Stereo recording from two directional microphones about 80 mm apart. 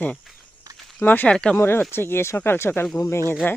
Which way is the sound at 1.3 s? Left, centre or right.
Centre.